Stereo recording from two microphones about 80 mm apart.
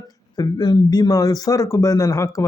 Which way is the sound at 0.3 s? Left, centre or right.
Left.